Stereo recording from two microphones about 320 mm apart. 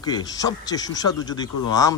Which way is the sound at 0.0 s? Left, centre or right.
Centre.